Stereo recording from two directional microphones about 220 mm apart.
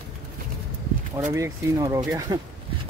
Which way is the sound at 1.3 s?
15° right (ahead or behind).